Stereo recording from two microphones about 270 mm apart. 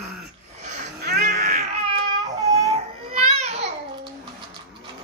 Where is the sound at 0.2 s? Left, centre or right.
Right.